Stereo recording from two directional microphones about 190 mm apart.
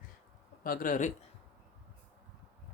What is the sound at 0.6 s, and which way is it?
Speech, 45° left (ahead or behind).